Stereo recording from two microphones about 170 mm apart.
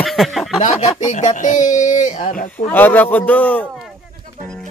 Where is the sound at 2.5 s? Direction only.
10° left (ahead or behind).